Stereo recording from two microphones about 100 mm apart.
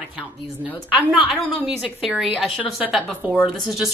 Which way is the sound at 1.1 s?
5° right (ahead or behind).